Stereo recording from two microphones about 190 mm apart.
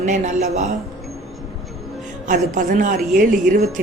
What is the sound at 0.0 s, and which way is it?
Speech, 40° right (ahead or behind).